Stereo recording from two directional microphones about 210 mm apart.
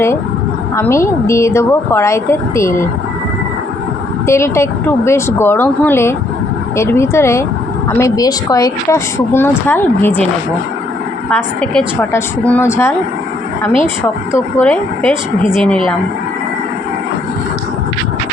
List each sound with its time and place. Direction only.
0.8 s a woman's voice: 15° left (ahead or behind)
4.3 s a woman's voice: 15° left (ahead or behind)
11.3 s a woman's voice: 5° left (ahead or behind)
14.6 s a woman's voice: 5° left (ahead or behind)